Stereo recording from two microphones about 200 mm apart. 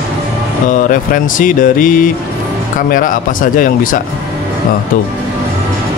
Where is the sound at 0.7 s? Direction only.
40° left (ahead or behind).